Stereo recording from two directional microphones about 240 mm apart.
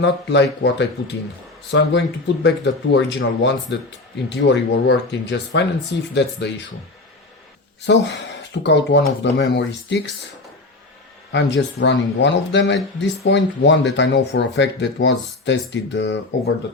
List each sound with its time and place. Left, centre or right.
0.0 s speech: left
7.9 s speech: left
11.3 s speech: left